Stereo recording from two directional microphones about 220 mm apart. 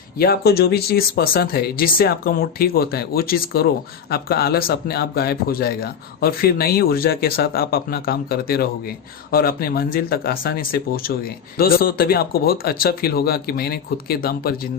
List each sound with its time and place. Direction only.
0.2 s speech: 45° left (ahead or behind)